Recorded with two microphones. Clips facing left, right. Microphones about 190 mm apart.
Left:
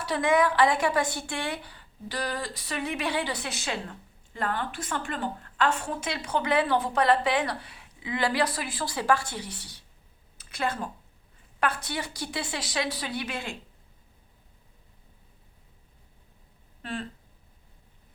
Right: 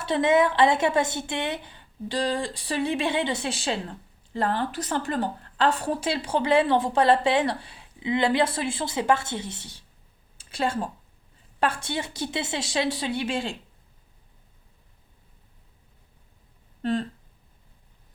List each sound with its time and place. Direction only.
0.0 s a woman's voice: 25° right (ahead or behind)
16.8 s speech: 35° right (ahead or behind)